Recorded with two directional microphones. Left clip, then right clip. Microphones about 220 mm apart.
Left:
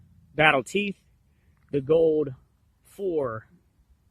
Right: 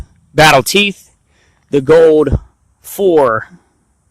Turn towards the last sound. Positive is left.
turn(degrees=-30)  # may be behind; listen again after turning